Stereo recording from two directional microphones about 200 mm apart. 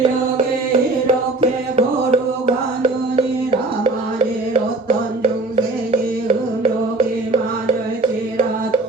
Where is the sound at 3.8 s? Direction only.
30° right (ahead or behind).